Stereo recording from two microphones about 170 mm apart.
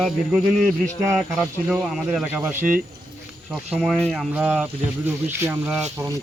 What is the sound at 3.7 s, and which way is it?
Speech, centre (ahead or behind).